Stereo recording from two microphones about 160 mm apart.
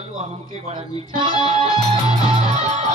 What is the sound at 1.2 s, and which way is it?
Music, 30° right (ahead or behind).